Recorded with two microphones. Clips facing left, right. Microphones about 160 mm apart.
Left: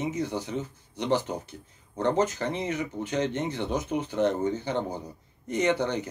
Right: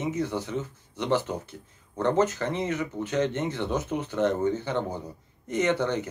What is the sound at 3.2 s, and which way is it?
Speech, 15° left (ahead or behind).